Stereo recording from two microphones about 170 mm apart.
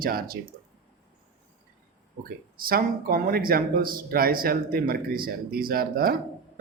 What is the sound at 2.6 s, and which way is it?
Speech, 60° right (ahead or behind).